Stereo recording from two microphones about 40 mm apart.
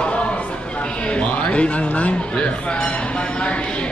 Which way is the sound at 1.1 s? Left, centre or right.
Left.